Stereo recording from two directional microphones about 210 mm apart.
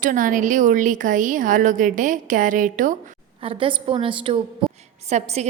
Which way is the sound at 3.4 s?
25° right (ahead or behind).